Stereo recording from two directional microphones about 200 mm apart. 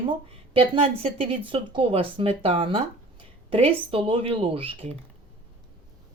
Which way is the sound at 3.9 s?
25° right (ahead or behind).